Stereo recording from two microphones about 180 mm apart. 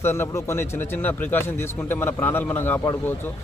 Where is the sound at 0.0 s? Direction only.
15° left (ahead or behind).